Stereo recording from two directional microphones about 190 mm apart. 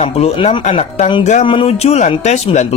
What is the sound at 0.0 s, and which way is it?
Speech, 30° left (ahead or behind).